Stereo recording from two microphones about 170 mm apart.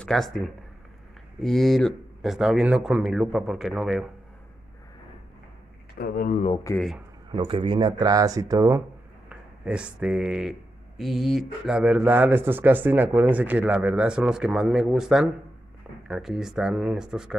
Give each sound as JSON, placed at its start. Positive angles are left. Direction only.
{"t": 0.0, "sound": "speech", "side_deg": 0}
{"t": 1.4, "sound": "speech", "side_deg": 0}
{"t": 5.9, "sound": "speech", "side_deg": 60}
{"t": 7.2, "sound": "speech", "side_deg": -30}
{"t": 9.3, "sound": "speech", "side_deg": -5}